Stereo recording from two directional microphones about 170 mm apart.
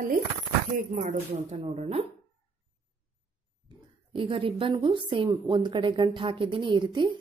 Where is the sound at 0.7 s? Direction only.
45° right (ahead or behind).